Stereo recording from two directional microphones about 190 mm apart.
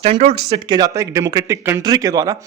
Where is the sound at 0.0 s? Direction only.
30° right (ahead or behind).